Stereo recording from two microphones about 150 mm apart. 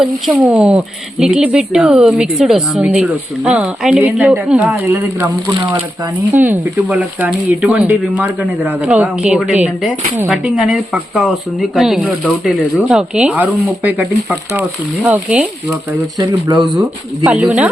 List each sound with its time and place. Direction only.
0.0 s speech: 5° right (ahead or behind)
6.4 s speech: 10° right (ahead or behind)
15.0 s speech: 10° right (ahead or behind)
15.9 s speech: 20° right (ahead or behind)
17.2 s speech: 5° right (ahead or behind)